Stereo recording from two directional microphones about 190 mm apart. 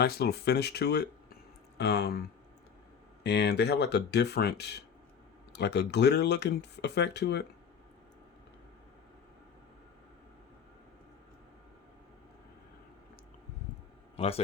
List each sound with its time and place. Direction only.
0.0 s speech: 55° left (ahead or behind)
3.2 s speech: 60° left (ahead or behind)
14.2 s a man's voice: 30° left (ahead or behind)